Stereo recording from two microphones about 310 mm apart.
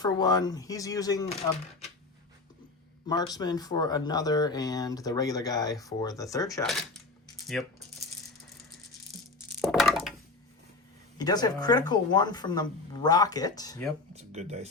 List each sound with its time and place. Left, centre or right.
0.0 s speech: centre
3.1 s speech: centre
9.6 s crack: centre
11.2 s speech: centre
14.1 s speech: right